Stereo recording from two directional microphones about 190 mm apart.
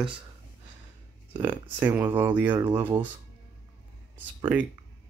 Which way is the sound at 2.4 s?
25° right (ahead or behind).